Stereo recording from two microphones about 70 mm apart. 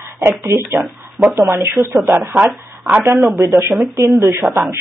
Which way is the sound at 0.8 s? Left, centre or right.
Right.